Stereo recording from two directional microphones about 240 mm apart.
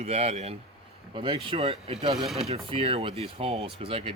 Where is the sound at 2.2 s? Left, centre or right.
Centre.